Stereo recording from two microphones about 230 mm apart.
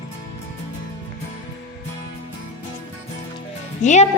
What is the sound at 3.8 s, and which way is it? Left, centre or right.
Speech, left.